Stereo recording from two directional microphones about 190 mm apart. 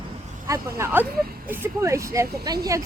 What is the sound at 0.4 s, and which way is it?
Speech, 15° right (ahead or behind).